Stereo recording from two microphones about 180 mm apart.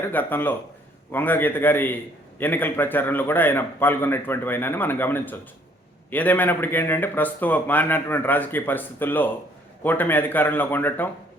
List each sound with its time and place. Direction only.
0.1 s a man's voice: 10° left (ahead or behind)